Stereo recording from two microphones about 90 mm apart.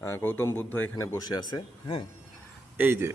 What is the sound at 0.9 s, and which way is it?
Speech, 35° left (ahead or behind).